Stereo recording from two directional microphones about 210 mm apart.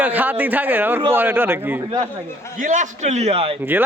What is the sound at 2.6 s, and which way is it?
A man's voice, 35° right (ahead or behind).